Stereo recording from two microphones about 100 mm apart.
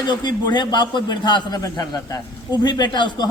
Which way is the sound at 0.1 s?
45° left (ahead or behind).